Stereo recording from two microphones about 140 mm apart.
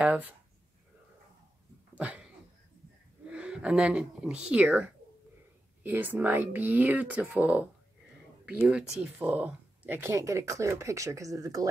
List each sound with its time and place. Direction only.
0.0 s speech: 10° right (ahead or behind)
2.0 s a sound: 10° right (ahead or behind)
3.3 s speech: 10° right (ahead or behind); by 11.7 s 25° right (ahead or behind)